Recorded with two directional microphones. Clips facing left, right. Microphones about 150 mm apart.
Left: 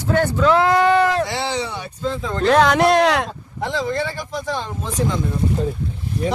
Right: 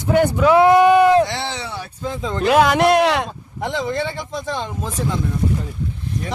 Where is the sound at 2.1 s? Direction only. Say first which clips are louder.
Left 1 dB; 15° right (ahead or behind); by 3.2 s centre (ahead or behind).